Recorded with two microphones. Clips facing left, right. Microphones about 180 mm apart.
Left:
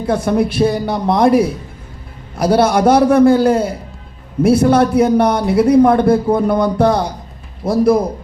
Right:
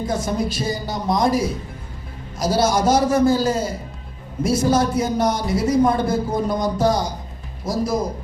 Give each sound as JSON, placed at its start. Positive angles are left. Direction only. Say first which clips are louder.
{"t": 0.0, "sound": "a man's voice", "louder": "left 7 dB", "side_deg": 60}